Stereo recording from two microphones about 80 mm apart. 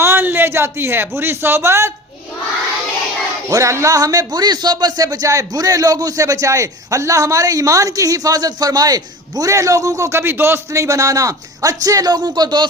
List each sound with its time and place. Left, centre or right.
0.0 s speech: right
3.5 s speech: right